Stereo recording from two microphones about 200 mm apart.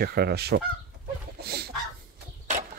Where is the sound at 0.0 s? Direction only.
50° right (ahead or behind).